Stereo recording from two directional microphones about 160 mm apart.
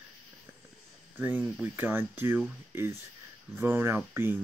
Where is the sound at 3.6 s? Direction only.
15° right (ahead or behind).